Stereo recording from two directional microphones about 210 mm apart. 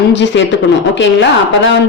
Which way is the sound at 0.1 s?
60° left (ahead or behind).